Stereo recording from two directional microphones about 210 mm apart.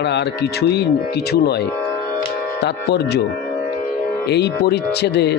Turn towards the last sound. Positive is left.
turn(degrees=55)  # may be behind; listen again after turning